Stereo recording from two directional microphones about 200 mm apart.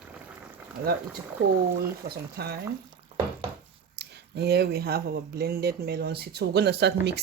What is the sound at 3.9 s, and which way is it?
Speech, 55° right (ahead or behind).